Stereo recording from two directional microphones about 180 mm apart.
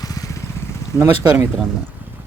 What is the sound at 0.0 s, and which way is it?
Vehicle, 20° left (ahead or behind).